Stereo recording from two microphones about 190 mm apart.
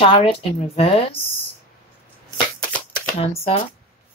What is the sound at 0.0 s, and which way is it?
A woman's voice, 30° left (ahead or behind).